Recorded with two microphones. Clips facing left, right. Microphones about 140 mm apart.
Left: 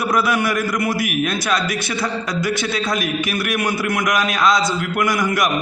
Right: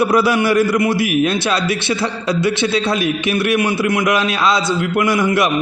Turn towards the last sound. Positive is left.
turn(degrees=-25)  # may be behind; listen again after turning